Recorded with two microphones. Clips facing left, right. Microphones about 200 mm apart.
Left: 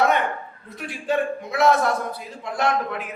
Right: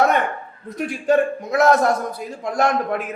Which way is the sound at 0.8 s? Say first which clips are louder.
Right 6 dB; 45° right (ahead or behind).